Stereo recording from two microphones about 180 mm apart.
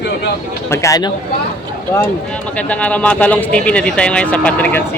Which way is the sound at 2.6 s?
5° left (ahead or behind).